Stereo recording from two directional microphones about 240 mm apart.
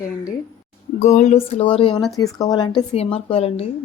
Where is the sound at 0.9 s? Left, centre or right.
Left.